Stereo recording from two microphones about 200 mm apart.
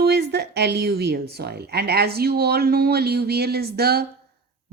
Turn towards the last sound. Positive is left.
turn(degrees=-50)  # may be behind; listen again after turning